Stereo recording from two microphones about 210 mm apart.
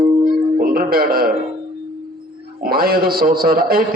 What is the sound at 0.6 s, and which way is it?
Mantra, 45° right (ahead or behind).